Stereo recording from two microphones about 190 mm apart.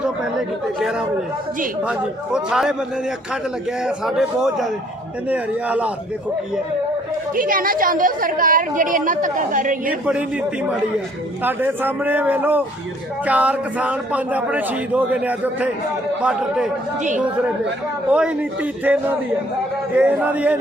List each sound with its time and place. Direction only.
0.8 s a man's voice: 5° right (ahead or behind)
3.8 s a man's voice: 5° right (ahead or behind)
7.3 s a woman's voice: 45° right (ahead or behind)
9.8 s a man's voice: 5° right (ahead or behind)
18.1 s a man's voice: 5° right (ahead or behind)